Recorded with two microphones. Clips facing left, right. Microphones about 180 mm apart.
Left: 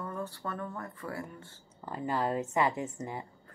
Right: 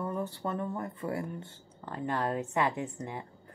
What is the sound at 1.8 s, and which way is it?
A woman's voice, 5° left (ahead or behind).